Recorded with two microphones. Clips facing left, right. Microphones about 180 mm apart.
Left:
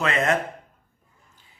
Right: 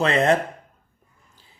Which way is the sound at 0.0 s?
30° right (ahead or behind).